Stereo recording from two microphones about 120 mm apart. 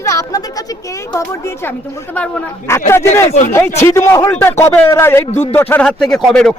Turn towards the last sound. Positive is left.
turn(degrees=5)  # may be behind; listen again after turning